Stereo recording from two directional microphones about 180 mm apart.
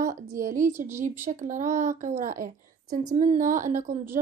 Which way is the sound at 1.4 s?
45° right (ahead or behind).